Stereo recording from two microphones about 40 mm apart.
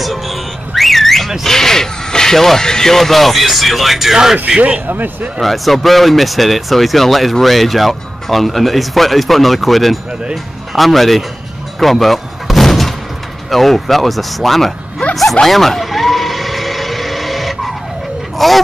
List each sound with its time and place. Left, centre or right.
0.0 s car alarm: centre
1.4 s speech: centre
4.6 s speech: right
4.8 s speech: right
5.4 s speech: centre
11.8 s a sound: centre
13.5 s speech: centre
15.0 s a sound: left
15.4 s vehicle: centre
18.4 s speech: centre